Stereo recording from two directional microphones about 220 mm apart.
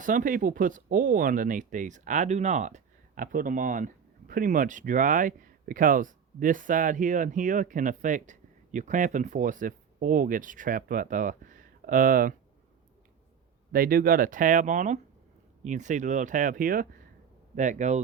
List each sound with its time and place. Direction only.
0.0 s speech: 35° right (ahead or behind)
13.7 s speech: 40° right (ahead or behind)